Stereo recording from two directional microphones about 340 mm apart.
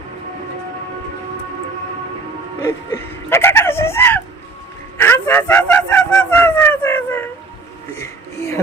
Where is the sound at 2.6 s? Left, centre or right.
Centre.